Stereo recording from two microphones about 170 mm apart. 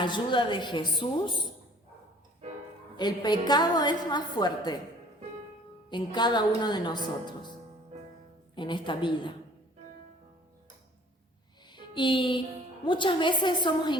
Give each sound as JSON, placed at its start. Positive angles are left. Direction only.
{"t": 0.0, "sound": "a woman's voice", "side_deg": 30}
{"t": 3.0, "sound": "a woman's voice", "side_deg": 25}
{"t": 5.9, "sound": "a woman's voice", "side_deg": 25}
{"t": 8.5, "sound": "a woman's voice", "side_deg": 30}
{"t": 11.7, "sound": "music", "side_deg": 25}
{"t": 12.8, "sound": "a woman's voice", "side_deg": 30}